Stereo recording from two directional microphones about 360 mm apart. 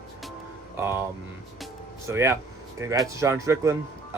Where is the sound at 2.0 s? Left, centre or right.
Centre.